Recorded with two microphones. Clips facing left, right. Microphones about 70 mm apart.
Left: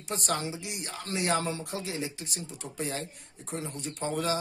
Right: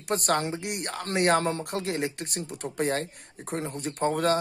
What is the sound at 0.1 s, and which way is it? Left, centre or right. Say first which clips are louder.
Speech: right 6 dB; right.